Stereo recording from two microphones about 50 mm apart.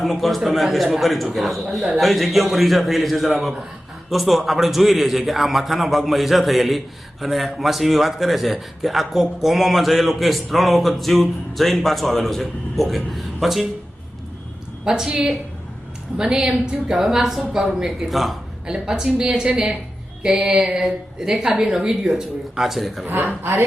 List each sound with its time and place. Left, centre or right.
0.0 s a man's voice: centre
14.8 s a man's voice: centre
23.2 s a man's voice: right